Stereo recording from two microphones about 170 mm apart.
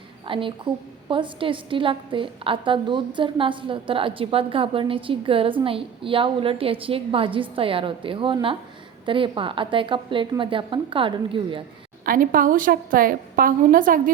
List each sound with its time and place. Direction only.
0.3 s a woman's voice: 30° right (ahead or behind)
12.0 s a woman's voice: 55° right (ahead or behind)